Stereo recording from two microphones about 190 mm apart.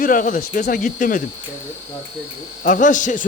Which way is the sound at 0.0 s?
45° left (ahead or behind).